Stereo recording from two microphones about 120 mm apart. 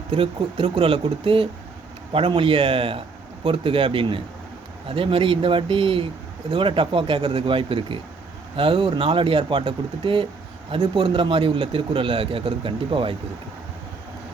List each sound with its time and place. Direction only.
0.1 s a man's voice: 55° right (ahead or behind)